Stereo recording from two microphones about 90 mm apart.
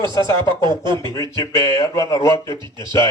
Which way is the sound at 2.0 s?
35° left (ahead or behind).